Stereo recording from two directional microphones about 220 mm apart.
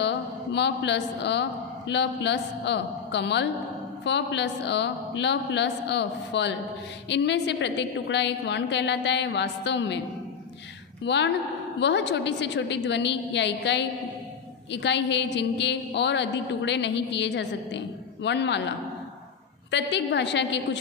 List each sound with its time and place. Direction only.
0.0 s a man's voice: 50° left (ahead or behind)
11.1 s a woman's voice: 50° left (ahead or behind)
19.7 s a woman's voice: 55° left (ahead or behind)